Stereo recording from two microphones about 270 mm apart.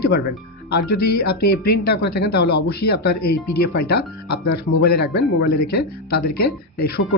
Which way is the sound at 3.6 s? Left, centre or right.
Left.